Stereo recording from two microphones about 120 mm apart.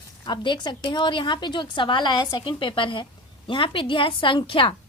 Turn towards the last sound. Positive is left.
turn(degrees=45)  # may be behind; listen again after turning